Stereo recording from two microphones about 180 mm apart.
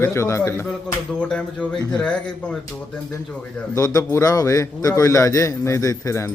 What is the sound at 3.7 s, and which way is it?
A man's voice, 15° left (ahead or behind).